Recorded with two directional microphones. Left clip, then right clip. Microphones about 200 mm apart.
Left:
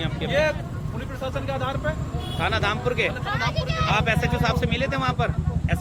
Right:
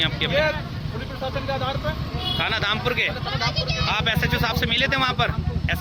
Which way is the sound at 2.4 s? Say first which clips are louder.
Left 1 dB; centre (ahead or behind).